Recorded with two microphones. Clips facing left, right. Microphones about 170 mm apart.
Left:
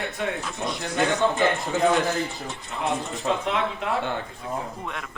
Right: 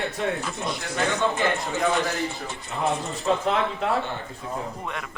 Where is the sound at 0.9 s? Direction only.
20° left (ahead or behind).